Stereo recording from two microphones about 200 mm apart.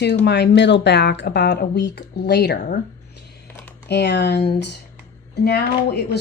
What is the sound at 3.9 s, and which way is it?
Speech, 60° left (ahead or behind).